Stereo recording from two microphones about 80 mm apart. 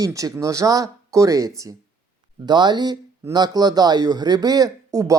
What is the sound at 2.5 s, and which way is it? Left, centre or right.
Speech, right.